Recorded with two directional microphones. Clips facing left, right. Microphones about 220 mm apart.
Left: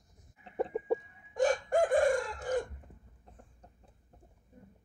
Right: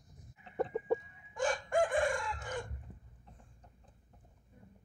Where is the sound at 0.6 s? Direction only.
10° left (ahead or behind).